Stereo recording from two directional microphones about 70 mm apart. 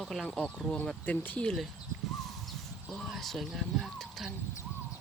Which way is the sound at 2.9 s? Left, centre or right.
Centre.